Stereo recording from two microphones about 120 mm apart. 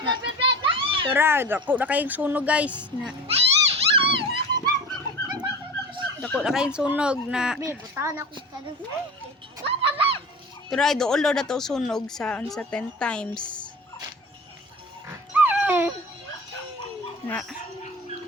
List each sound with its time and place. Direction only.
0.0 s children playing: 45° right (ahead or behind)
1.1 s speech: 20° right (ahead or behind)
3.2 s dog: 55° right (ahead or behind)
4.5 s bird: 35° right (ahead or behind)
6.4 s speech: 5° right (ahead or behind)
7.6 s speech: 20° right (ahead or behind)
9.6 s a sound: 50° right (ahead or behind)
10.7 s speech: 5° left (ahead or behind)
13.3 s speech: 40° left (ahead or behind)
15.3 s dog: 15° right (ahead or behind)